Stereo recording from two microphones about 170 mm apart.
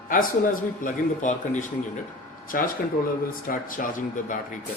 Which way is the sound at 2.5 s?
55° left (ahead or behind).